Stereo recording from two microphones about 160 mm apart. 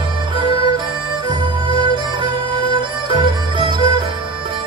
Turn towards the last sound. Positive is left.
turn(degrees=-30)  # may be behind; listen again after turning